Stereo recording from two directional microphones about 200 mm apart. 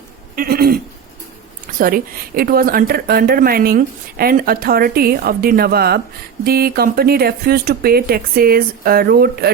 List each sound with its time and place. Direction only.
0.3 s speech: 50° right (ahead or behind)
1.8 s speech: 45° right (ahead or behind)